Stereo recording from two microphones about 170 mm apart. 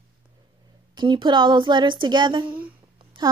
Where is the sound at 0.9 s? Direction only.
25° right (ahead or behind).